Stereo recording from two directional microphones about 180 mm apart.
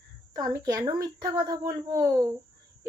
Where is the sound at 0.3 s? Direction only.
20° right (ahead or behind).